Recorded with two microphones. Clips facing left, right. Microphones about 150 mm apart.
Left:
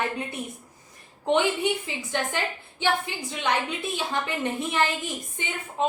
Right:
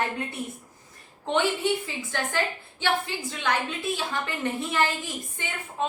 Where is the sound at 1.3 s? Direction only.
15° left (ahead or behind).